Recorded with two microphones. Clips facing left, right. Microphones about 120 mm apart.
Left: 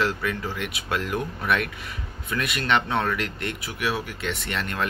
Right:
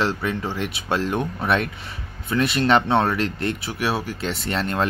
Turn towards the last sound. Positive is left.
turn(degrees=-30)  # may be behind; listen again after turning